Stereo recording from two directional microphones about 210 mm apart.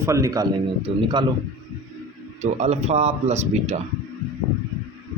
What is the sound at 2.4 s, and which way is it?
A man's voice, 30° right (ahead or behind).